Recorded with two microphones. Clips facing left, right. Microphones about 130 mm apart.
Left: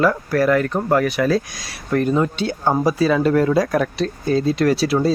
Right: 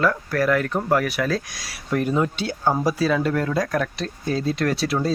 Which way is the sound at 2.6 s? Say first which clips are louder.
Left 2 dB; 25° left (ahead or behind).